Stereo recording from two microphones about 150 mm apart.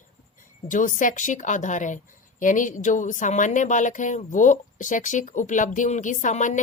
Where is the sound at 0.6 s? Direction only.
60° left (ahead or behind).